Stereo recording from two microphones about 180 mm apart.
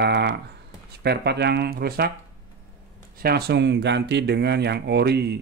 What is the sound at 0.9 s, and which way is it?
Speech, 65° right (ahead or behind).